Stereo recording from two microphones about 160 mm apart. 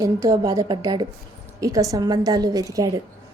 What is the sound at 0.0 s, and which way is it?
A woman's voice, 20° right (ahead or behind).